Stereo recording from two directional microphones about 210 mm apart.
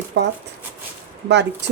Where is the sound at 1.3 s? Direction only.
55° right (ahead or behind).